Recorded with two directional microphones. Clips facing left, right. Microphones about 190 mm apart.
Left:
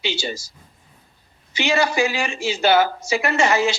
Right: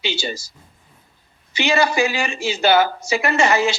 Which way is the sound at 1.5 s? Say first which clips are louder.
Right 1 dB; 65° right (ahead or behind).